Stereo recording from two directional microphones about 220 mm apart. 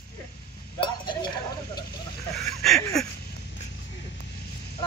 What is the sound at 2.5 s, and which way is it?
Speech, centre (ahead or behind).